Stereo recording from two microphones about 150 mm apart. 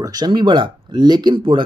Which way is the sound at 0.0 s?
25° right (ahead or behind).